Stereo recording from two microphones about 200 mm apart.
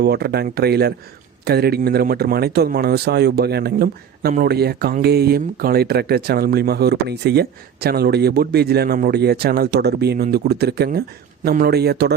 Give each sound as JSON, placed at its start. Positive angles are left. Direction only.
{"t": 0.0, "sound": "speech", "side_deg": -55}